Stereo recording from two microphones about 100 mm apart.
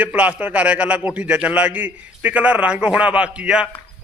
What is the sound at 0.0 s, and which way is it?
A man's voice, 15° right (ahead or behind).